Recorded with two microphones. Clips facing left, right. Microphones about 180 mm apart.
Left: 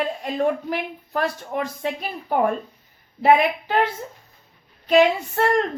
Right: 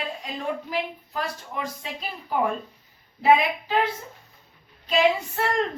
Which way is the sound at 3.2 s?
60° left (ahead or behind).